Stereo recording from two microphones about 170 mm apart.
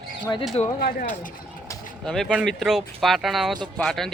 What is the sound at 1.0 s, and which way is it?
Speech, 45° left (ahead or behind).